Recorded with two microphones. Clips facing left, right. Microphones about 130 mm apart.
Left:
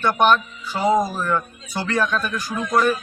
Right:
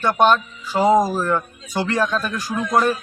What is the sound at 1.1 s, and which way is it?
Speech, 35° right (ahead or behind).